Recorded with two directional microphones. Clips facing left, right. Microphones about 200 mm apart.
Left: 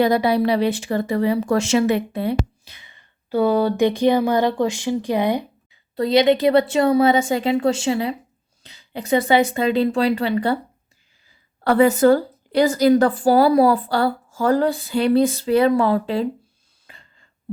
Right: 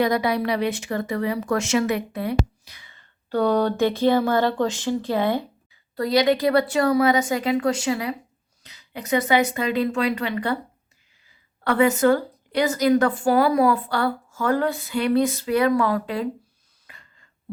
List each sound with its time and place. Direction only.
0.0 s a woman's voice: 30° left (ahead or behind)
3.2 s speech: 5° left (ahead or behind); by 10.6 s 30° left (ahead or behind)
11.6 s a woman's voice: 35° left (ahead or behind)
16.8 s a sound: 30° left (ahead or behind)